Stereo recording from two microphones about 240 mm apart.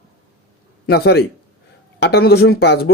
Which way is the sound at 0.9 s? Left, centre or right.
Left.